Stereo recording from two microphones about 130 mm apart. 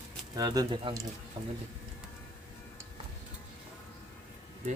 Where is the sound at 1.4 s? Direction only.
40° right (ahead or behind).